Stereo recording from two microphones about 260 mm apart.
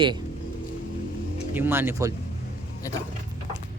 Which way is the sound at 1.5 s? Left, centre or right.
Centre.